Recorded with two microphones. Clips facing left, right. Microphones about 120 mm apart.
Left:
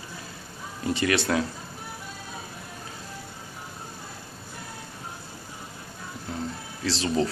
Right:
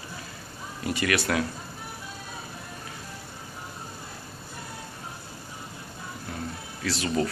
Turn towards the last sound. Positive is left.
turn(degrees=25)  # may be behind; listen again after turning